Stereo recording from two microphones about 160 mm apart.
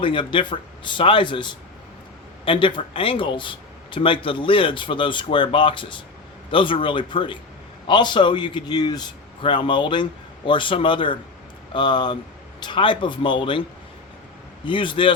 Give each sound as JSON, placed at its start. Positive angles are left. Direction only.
{"t": 0.0, "sound": "a man's voice", "side_deg": 30}